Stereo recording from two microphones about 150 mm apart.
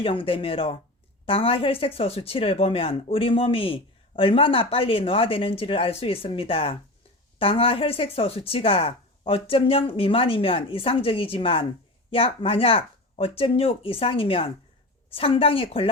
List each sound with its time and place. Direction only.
0.0 s speech: 35° left (ahead or behind)